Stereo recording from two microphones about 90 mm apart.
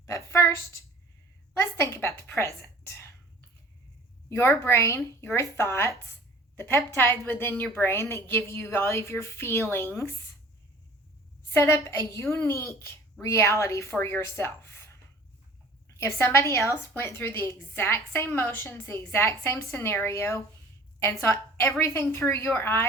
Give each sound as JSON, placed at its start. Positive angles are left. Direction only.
{"t": 0.0, "sound": "a sound", "side_deg": 35}
{"t": 1.5, "sound": "a woman's voice", "side_deg": 30}
{"t": 4.3, "sound": "a woman's voice", "side_deg": 30}
{"t": 11.5, "sound": "speech", "side_deg": 30}
{"t": 16.0, "sound": "a woman's voice", "side_deg": 25}